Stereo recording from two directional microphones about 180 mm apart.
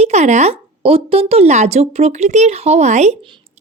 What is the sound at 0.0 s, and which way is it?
Speech, 40° right (ahead or behind).